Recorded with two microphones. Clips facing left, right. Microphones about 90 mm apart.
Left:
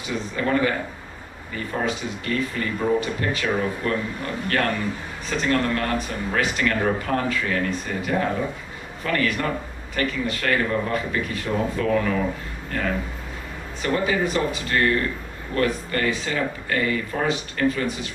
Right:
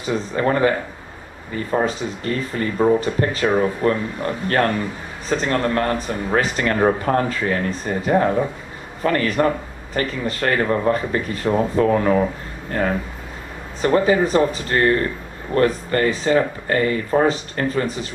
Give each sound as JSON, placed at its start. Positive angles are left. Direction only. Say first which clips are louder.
{"t": 0.0, "sound": "speech", "louder": "right 5 dB", "side_deg": -35}